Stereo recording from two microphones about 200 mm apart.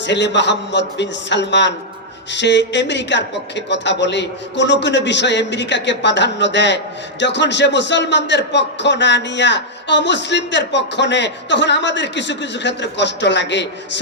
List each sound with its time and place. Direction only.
0.0 s a man's voice: 60° left (ahead or behind)